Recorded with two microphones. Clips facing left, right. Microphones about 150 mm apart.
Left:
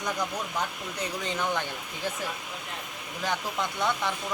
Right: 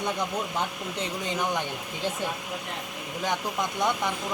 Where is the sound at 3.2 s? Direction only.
15° right (ahead or behind).